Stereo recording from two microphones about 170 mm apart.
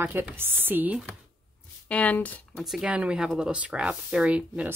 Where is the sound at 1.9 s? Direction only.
10° left (ahead or behind).